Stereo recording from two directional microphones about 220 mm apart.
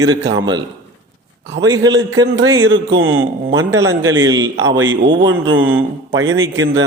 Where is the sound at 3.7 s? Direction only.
15° right (ahead or behind).